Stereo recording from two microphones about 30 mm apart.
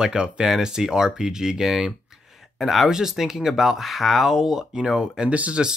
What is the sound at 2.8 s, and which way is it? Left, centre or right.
Speech, right.